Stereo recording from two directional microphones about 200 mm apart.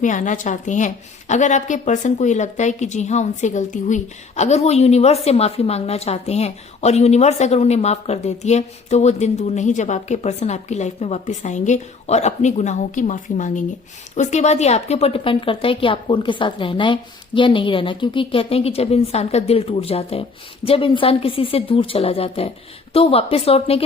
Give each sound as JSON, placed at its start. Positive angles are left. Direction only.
{"t": 0.0, "sound": "a woman's voice", "side_deg": 40}